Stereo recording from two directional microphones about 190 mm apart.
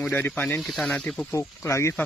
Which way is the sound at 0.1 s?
10° left (ahead or behind).